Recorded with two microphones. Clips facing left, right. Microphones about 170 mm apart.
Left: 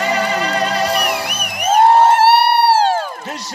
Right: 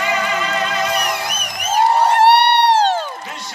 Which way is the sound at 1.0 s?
60° left (ahead or behind).